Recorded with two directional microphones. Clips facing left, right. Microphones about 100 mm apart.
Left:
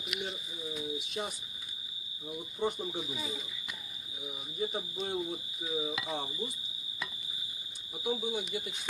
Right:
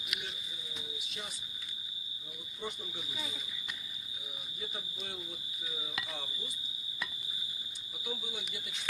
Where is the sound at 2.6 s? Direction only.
40° left (ahead or behind).